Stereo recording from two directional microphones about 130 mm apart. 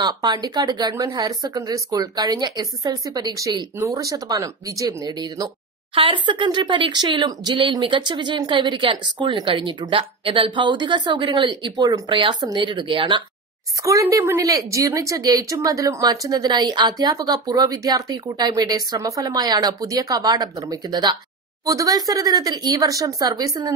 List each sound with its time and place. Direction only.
0.0 s speech: 30° right (ahead or behind)
14.2 s speech: 25° right (ahead or behind)